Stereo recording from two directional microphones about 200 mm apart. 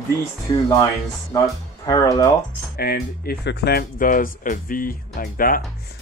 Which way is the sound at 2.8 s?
50° left (ahead or behind).